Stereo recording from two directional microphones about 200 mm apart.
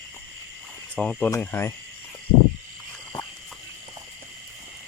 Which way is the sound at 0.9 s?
5° left (ahead or behind).